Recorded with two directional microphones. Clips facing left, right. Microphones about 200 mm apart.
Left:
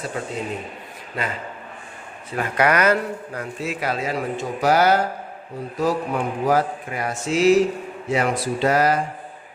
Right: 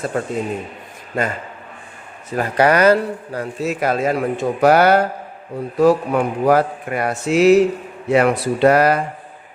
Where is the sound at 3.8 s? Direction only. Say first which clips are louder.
Right 7 dB; 50° right (ahead or behind).